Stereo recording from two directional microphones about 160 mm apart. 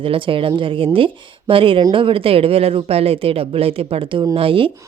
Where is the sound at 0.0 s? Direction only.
35° right (ahead or behind).